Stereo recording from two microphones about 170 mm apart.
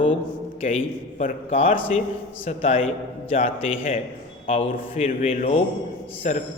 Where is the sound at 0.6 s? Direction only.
35° left (ahead or behind).